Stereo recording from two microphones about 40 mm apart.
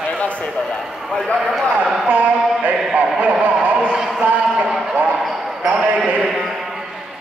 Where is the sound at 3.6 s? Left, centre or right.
Right.